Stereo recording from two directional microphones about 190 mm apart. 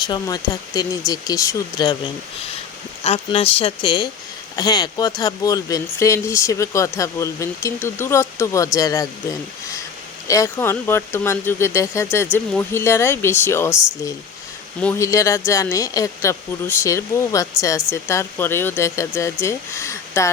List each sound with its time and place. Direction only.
0.0 s speech: 20° left (ahead or behind)
3.0 s speech: 30° left (ahead or behind); by 13.7 s 10° left (ahead or behind)
14.8 s speech: 10° left (ahead or behind)